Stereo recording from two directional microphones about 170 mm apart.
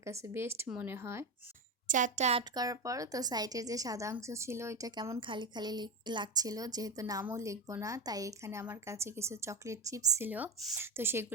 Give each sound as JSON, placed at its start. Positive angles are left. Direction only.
{"t": 0.0, "sound": "speech", "side_deg": -15}
{"t": 1.9, "sound": "a woman's voice", "side_deg": -50}
{"t": 2.6, "sound": "a woman's voice", "side_deg": -20}